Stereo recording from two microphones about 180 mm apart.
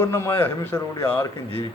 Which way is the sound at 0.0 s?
15° left (ahead or behind).